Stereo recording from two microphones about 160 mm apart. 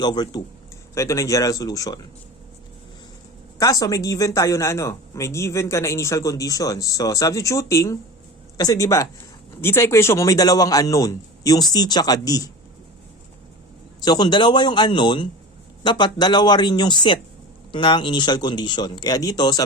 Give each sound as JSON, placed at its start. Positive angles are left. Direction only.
{"t": 0.0, "sound": "speech", "side_deg": 25}
{"t": 3.6, "sound": "speech", "side_deg": 20}
{"t": 14.0, "sound": "speech", "side_deg": 25}